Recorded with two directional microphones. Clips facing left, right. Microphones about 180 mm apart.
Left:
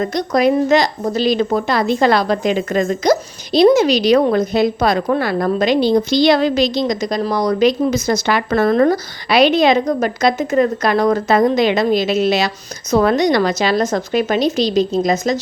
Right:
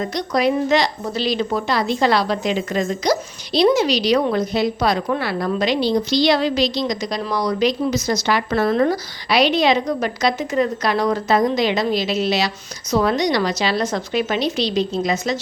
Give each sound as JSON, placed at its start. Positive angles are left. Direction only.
{"t": 0.0, "sound": "a woman's voice", "side_deg": 50}